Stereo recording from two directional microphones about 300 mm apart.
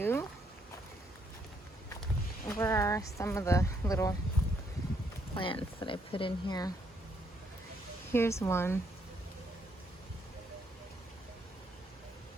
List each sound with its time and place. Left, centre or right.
0.0 s a sound: centre
2.5 s speech: centre
5.3 s speech: centre
8.1 s speech: centre